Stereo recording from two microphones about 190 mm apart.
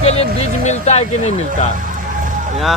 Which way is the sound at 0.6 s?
35° left (ahead or behind).